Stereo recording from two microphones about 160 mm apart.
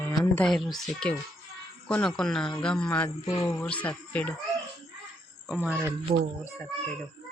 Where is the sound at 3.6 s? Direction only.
10° left (ahead or behind).